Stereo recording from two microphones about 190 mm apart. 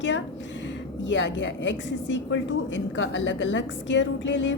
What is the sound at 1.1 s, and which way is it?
A woman's voice, 75° left (ahead or behind).